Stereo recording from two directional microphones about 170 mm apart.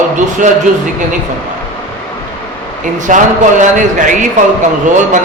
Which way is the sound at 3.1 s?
50° right (ahead or behind).